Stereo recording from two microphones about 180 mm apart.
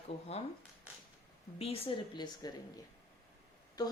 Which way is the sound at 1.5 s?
35° left (ahead or behind).